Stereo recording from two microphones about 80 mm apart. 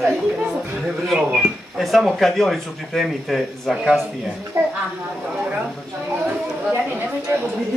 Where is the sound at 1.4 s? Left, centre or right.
Centre.